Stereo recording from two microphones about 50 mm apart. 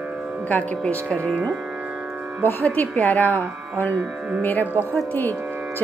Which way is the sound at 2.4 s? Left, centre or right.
Left.